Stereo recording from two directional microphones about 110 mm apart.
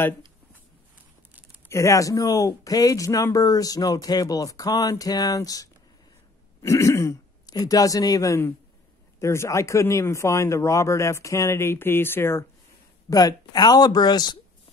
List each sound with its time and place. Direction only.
1.7 s speech: 25° left (ahead or behind)
13.1 s speech: 35° left (ahead or behind)